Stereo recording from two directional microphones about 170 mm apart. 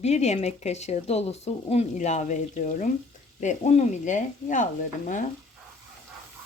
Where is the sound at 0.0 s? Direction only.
40° left (ahead or behind).